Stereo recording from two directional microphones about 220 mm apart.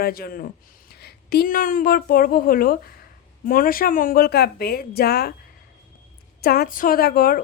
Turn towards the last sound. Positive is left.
turn(degrees=40)  # may be behind; listen again after turning